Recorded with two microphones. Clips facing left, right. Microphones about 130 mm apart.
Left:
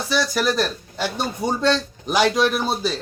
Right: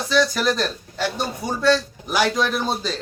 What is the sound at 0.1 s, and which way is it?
Speech, 10° left (ahead or behind).